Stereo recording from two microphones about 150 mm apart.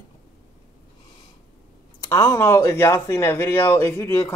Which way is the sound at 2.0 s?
20° left (ahead or behind).